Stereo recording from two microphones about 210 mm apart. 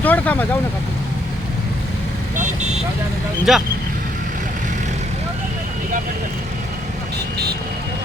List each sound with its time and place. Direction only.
0.0 s vehicle: 10° left (ahead or behind)
2.3 s vehicle: 35° right (ahead or behind)
3.5 s speech: centre (ahead or behind)